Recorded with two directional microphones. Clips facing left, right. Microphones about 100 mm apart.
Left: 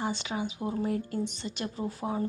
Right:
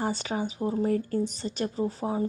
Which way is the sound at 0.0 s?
40° right (ahead or behind).